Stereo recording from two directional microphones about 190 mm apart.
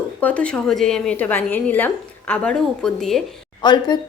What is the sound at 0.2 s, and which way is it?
A woman's voice, 5° left (ahead or behind).